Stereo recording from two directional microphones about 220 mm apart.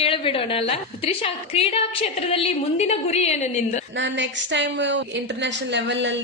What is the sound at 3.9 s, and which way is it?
A woman's voice, 55° right (ahead or behind).